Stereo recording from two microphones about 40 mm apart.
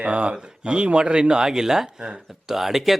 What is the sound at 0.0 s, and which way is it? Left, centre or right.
Speech, right.